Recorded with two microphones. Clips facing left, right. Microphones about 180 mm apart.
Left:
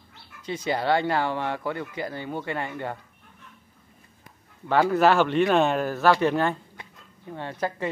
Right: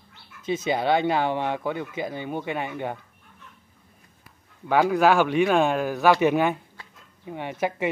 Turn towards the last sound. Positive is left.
turn(degrees=-15)  # may be behind; listen again after turning